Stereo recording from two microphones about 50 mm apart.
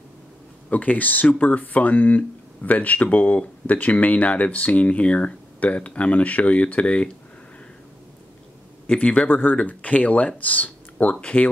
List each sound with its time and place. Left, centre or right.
0.7 s speech: left
8.8 s speech: left
9.3 s speech: left